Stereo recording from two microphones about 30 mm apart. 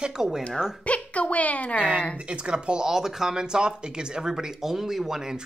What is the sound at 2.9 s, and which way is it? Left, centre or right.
Speech, centre.